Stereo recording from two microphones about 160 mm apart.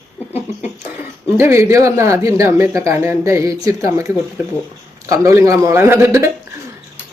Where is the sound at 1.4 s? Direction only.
15° right (ahead or behind).